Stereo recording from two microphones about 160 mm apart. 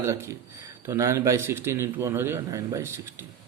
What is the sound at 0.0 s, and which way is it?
Speech, 20° right (ahead or behind).